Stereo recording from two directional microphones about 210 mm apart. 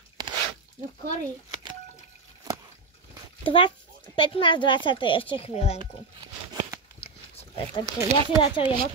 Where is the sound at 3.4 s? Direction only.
25° left (ahead or behind).